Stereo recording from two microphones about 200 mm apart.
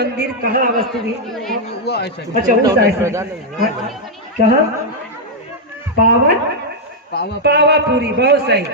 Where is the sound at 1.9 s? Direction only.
55° left (ahead or behind).